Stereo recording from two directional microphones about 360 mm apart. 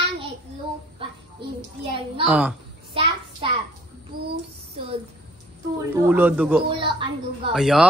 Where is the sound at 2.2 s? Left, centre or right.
Centre.